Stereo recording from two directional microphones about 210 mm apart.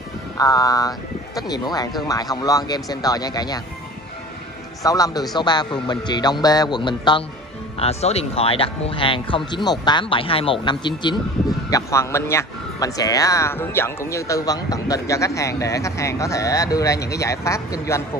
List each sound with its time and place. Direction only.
0.4 s speech: 15° left (ahead or behind)
4.8 s speech: 15° left (ahead or behind)